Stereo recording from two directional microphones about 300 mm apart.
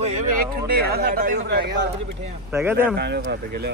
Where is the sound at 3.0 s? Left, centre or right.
Right.